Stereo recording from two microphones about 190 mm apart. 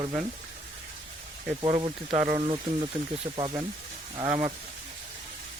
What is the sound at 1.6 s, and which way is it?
Speech, 25° right (ahead or behind).